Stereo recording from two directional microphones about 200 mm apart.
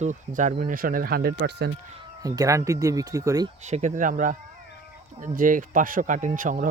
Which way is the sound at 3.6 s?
35° right (ahead or behind).